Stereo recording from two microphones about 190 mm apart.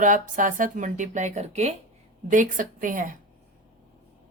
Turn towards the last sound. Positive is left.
turn(degrees=-45)  # may be behind; listen again after turning